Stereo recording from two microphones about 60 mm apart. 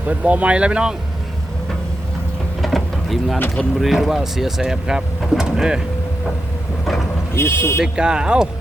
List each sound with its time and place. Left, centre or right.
0.0 s speech: right
2.6 s vehicle: centre
3.8 s speech: centre
7.3 s speech: left
7.8 s speech: centre